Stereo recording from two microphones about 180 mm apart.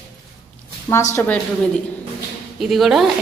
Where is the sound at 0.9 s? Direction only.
15° left (ahead or behind).